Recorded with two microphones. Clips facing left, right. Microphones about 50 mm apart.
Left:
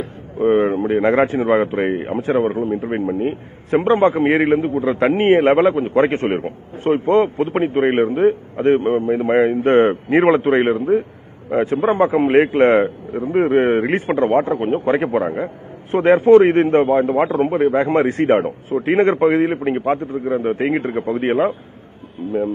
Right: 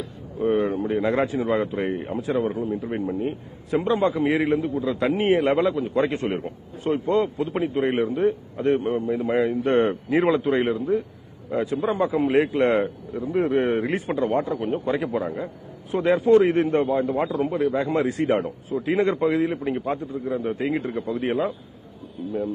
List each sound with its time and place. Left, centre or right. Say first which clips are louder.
0.0 s speech: left 7 dB; left